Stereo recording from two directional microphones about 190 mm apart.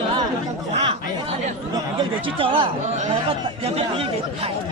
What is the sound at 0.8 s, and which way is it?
A man's voice, 30° right (ahead or behind).